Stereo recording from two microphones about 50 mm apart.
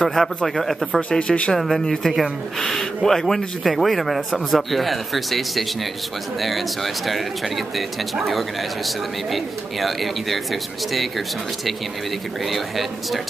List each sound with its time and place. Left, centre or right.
0.2 s speech: centre
1.1 s speech: left
1.6 s speech: centre